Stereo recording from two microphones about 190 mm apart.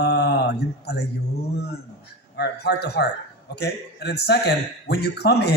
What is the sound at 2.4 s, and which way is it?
A man's voice, 60° left (ahead or behind).